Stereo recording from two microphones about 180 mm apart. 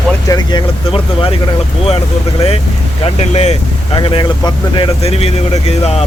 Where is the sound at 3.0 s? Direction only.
35° left (ahead or behind).